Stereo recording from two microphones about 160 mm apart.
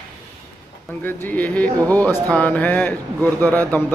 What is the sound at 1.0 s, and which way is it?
A man's voice, 10° left (ahead or behind).